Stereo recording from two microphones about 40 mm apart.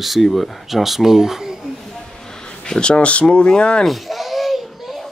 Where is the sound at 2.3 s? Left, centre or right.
Centre.